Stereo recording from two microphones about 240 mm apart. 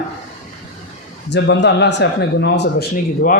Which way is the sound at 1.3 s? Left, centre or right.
Left.